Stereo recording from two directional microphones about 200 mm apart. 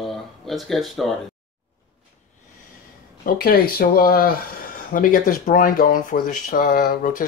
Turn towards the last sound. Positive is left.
turn(degrees=45)  # may be behind; listen again after turning